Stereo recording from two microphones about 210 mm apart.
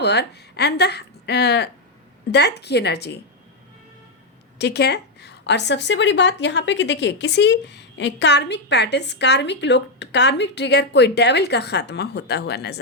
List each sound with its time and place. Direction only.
0.0 s a woman's voice: 55° left (ahead or behind)
4.5 s a woman's voice: 50° left (ahead or behind)